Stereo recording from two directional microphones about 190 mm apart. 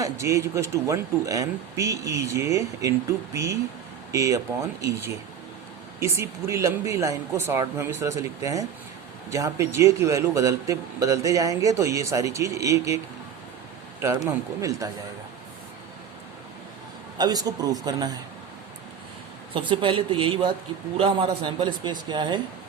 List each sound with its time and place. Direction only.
0.0 s a man's voice: 15° right (ahead or behind)
14.3 s a man's voice: 15° right (ahead or behind)
17.2 s a man's voice: 20° right (ahead or behind)
19.5 s a man's voice: 25° right (ahead or behind)